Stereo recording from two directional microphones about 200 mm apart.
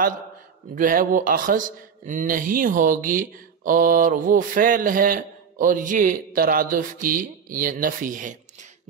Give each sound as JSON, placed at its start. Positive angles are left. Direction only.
{"t": 0.7, "sound": "speech", "side_deg": -40}